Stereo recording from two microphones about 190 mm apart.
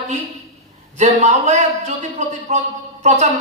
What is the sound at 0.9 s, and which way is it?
A man's voice, 40° right (ahead or behind).